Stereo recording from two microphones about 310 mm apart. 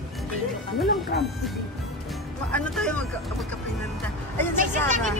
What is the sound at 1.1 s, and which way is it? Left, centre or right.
Music, left.